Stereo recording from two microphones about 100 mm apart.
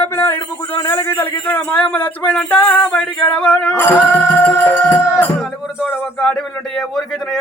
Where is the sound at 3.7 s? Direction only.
20° left (ahead or behind).